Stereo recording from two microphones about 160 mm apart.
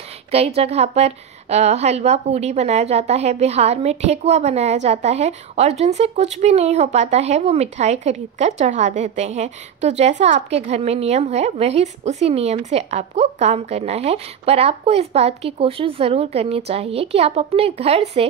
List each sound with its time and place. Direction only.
0.3 s a woman's voice: 40° right (ahead or behind)